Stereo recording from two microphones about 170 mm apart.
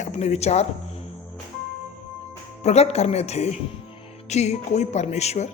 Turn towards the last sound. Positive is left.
turn(degrees=40)  # may be behind; listen again after turning